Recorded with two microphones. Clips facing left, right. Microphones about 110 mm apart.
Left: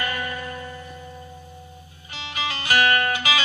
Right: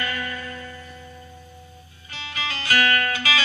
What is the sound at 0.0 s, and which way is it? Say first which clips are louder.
Music: left 1 dB; 20° left (ahead or behind).